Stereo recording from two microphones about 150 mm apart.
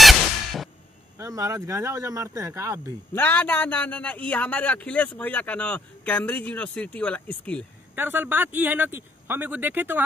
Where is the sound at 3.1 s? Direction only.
10° left (ahead or behind).